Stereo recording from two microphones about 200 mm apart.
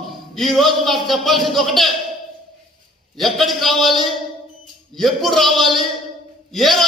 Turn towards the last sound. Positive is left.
turn(degrees=0)  # may be behind; listen again after turning